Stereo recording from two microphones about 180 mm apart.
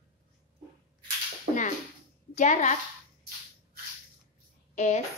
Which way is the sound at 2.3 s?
40° left (ahead or behind).